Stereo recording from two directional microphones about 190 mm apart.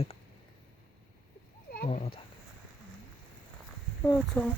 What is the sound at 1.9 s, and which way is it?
Speech, 30° left (ahead or behind).